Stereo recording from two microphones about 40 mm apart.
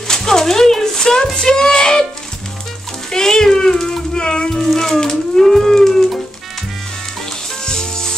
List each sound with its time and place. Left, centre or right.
0.1 s a sound: centre
1.3 s speech: centre
3.1 s a sound: centre
3.7 s music: centre
4.6 s music: centre
7.6 s music: centre